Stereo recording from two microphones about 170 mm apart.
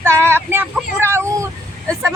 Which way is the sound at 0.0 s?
15° right (ahead or behind).